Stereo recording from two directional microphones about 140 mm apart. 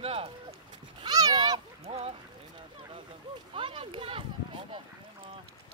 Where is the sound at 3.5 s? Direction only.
40° right (ahead or behind).